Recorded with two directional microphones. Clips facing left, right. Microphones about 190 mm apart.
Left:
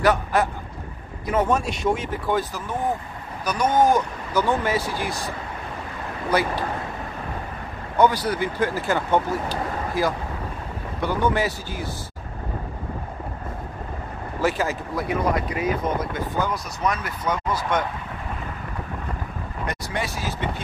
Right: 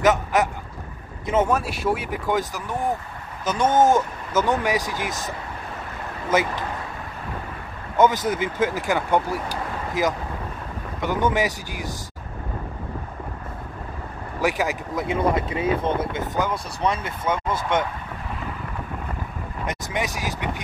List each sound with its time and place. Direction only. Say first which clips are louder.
0.0 s speech: right 1 dB; 20° right (ahead or behind)
1.5 s speech: left 1 dB; 5° right (ahead or behind)
8.0 s speech: even; 20° right (ahead or behind)
14.4 s speech: even; 15° right (ahead or behind)
19.6 s speech: right 1 dB; 20° right (ahead or behind)